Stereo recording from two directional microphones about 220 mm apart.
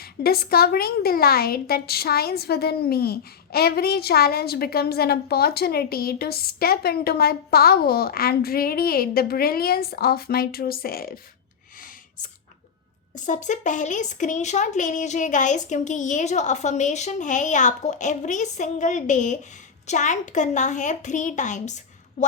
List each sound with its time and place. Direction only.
0.0 s a woman's voice: 45° left (ahead or behind)
13.1 s speech: 35° left (ahead or behind)